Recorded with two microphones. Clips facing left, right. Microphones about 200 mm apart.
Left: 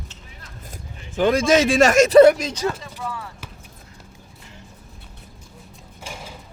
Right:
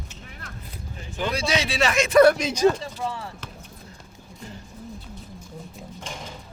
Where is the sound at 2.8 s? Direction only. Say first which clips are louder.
Right 2 dB; 30° right (ahead or behind).